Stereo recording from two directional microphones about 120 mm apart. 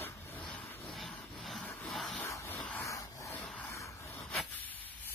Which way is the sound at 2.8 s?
25° left (ahead or behind).